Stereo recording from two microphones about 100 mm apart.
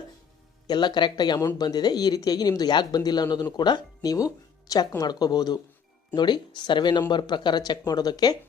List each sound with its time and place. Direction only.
0.7 s speech: 50° left (ahead or behind)